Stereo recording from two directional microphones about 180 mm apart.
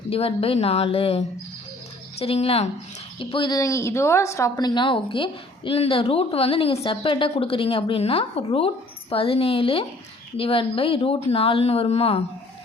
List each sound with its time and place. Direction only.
0.1 s a woman's voice: 30° left (ahead or behind)